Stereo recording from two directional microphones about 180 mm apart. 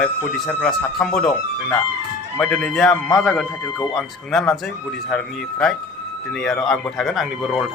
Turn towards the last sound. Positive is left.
turn(degrees=0)  # may be behind; listen again after turning